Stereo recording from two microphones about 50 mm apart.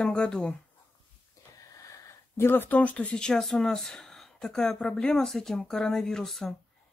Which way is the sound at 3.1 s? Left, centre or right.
Centre.